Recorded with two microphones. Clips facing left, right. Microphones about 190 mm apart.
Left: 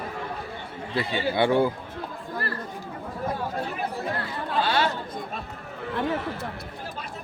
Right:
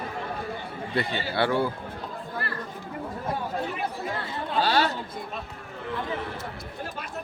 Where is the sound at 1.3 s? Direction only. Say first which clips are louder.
Left 3 dB; 15° left (ahead or behind).